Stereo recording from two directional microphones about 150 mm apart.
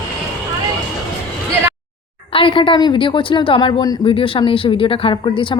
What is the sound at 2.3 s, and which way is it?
A woman's voice, 35° left (ahead or behind).